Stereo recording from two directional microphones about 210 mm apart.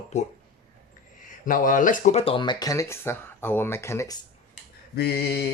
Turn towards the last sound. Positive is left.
turn(degrees=50)  # may be behind; listen again after turning